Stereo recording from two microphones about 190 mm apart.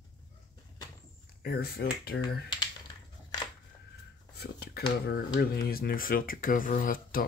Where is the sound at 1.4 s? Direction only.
55° left (ahead or behind).